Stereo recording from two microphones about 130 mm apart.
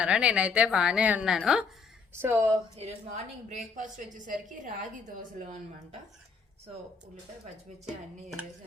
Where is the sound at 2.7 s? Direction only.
65° right (ahead or behind).